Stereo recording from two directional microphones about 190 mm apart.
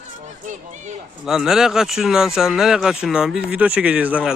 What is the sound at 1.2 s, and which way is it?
Speech, 5° right (ahead or behind).